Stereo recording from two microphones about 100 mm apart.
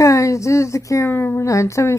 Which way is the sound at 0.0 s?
30° left (ahead or behind).